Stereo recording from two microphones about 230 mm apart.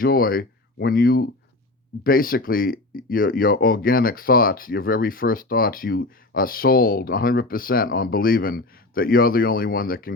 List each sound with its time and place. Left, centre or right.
0.0 s speech: left